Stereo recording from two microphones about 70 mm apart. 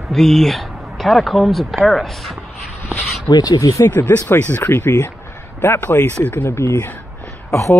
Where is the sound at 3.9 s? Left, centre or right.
Left.